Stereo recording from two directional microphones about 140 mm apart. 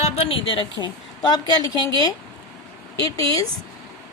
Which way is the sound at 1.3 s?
30° left (ahead or behind).